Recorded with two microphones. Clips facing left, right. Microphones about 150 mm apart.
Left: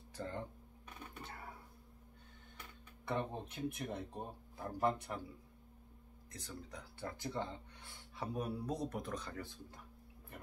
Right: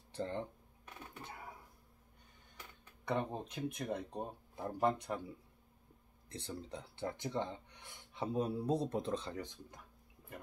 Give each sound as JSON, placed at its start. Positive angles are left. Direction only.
{"t": 0.1, "sound": "a sound", "side_deg": -25}
{"t": 3.1, "sound": "speech", "side_deg": -20}
{"t": 6.3, "sound": "speech", "side_deg": -30}